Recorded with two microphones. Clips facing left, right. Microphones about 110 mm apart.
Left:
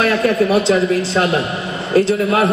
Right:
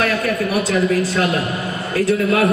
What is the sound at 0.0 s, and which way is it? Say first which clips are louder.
Speech: left 4 dB; 30° left (ahead or behind).